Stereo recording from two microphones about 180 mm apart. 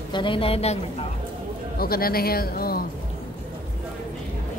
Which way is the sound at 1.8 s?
55° left (ahead or behind).